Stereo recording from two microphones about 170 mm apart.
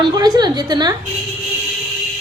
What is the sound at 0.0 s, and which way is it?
Speech, 25° right (ahead or behind).